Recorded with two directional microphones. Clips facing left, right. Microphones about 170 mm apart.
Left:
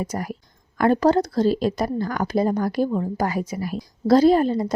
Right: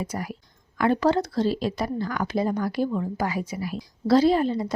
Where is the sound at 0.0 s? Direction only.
45° left (ahead or behind).